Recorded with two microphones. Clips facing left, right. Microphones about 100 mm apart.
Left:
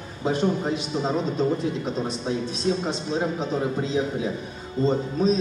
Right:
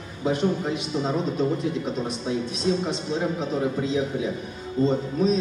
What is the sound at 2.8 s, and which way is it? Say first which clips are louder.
A man's voice: even; 30° left (ahead or behind).